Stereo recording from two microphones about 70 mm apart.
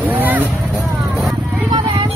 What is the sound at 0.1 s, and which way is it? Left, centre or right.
Vehicle, right.